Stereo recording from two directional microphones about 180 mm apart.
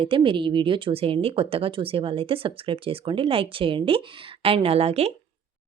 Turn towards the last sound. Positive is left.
turn(degrees=-35)  # may be behind; listen again after turning